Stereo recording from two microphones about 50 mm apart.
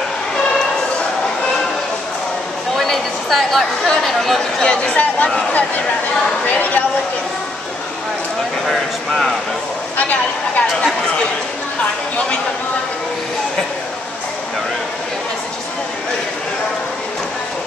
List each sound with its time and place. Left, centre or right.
2.7 s speech: centre
4.9 s speech: left
8.6 s speech: centre
9.9 s speech: left